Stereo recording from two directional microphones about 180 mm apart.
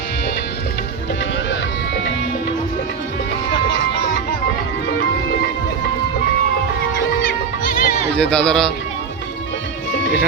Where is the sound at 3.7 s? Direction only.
85° left.